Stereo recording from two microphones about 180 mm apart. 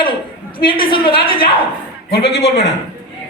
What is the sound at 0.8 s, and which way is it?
Speech, 30° left (ahead or behind).